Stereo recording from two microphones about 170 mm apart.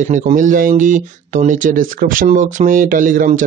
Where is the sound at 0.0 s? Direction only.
50° right (ahead or behind).